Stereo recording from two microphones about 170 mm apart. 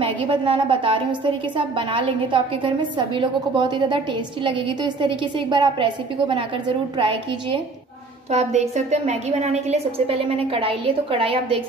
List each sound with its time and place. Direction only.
0.0 s a woman's voice: 30° right (ahead or behind)
8.3 s a woman's voice: 40° right (ahead or behind)